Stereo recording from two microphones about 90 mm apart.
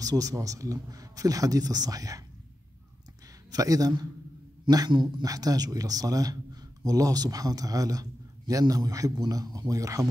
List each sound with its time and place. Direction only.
0.0 s speech: 40° right (ahead or behind)
3.5 s speech: 40° right (ahead or behind)